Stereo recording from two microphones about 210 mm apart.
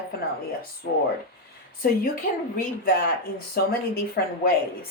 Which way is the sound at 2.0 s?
40° left (ahead or behind).